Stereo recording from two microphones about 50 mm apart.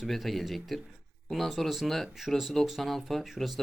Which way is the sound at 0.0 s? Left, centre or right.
Centre.